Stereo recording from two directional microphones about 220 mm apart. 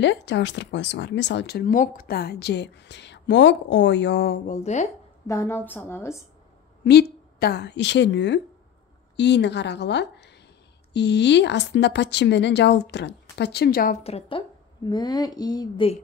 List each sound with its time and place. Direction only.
0.0 s speech: 55° left (ahead or behind)
4.5 s speech: 30° left (ahead or behind)
5.2 s a woman's voice: 15° left (ahead or behind)
6.8 s a woman's voice: 50° left (ahead or behind)
14.0 s a woman's voice: 25° left (ahead or behind)